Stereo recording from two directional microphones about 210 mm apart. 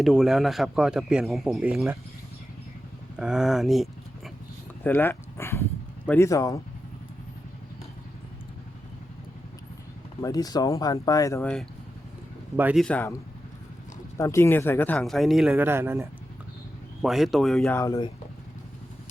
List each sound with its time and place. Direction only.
0.0 s speech: centre (ahead or behind)
3.2 s speech: 5° right (ahead or behind)
4.8 s speech: 10° left (ahead or behind)
10.2 s speech: 15° left (ahead or behind)
12.5 s a man's voice: 5° right (ahead or behind)
12.8 s speech: 5° left (ahead or behind)
14.2 s speech: 15° left (ahead or behind)
17.7 s speech: 15° left (ahead or behind)